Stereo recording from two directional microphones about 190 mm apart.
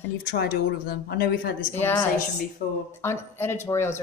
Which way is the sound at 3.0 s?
15° left (ahead or behind).